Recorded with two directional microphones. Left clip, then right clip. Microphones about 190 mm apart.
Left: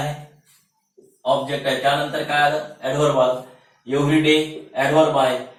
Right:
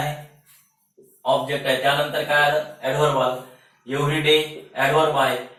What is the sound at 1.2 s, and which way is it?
Speech, centre (ahead or behind).